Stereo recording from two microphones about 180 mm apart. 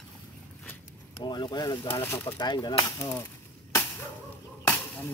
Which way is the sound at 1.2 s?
25° left (ahead or behind).